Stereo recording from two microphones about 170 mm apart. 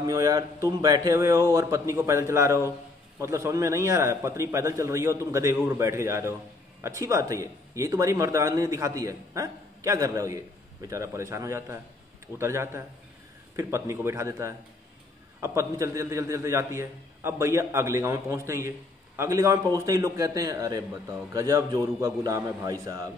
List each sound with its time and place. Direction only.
0.0 s a man's voice: 20° right (ahead or behind)